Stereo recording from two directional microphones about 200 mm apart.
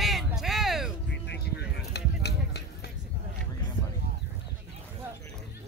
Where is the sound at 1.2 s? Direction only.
55° left (ahead or behind).